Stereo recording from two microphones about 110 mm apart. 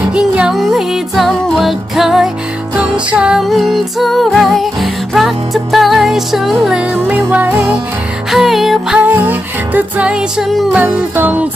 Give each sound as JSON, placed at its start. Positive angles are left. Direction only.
{"t": 0.0, "sound": "music", "side_deg": -10}
{"t": 6.9, "sound": "music", "side_deg": -15}
{"t": 8.3, "sound": "music", "side_deg": 0}
{"t": 9.0, "sound": "music", "side_deg": -15}
{"t": 10.8, "sound": "music", "side_deg": -15}